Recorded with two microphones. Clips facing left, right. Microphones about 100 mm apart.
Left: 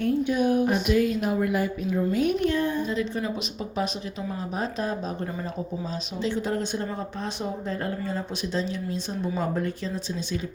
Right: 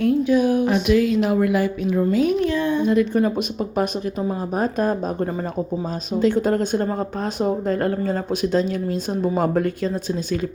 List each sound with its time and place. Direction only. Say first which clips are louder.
0.0 s speech: right 6 dB; 90° right; by 10.2 s 55° right (ahead or behind)